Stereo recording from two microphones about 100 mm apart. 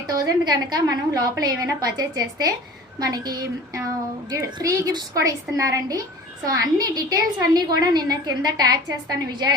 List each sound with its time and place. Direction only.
0.1 s a woman's voice: 40° right (ahead or behind)